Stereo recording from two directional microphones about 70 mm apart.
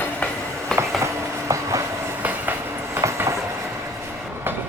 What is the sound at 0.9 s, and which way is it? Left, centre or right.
Train, right.